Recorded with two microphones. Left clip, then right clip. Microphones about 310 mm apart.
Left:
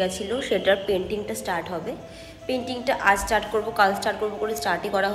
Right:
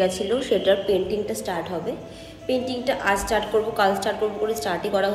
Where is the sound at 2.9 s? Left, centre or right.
Centre.